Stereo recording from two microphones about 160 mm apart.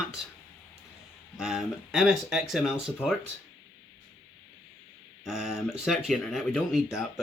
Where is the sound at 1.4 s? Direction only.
5° right (ahead or behind).